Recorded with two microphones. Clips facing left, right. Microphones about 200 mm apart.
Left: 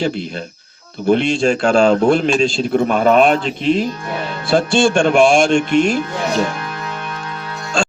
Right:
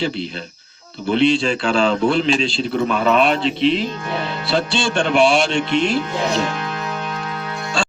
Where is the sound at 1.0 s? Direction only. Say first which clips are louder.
Left 2 dB; 45° left (ahead or behind).